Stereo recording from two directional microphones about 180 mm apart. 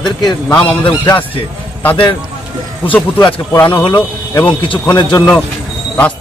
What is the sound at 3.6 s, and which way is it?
Speech, 10° left (ahead or behind).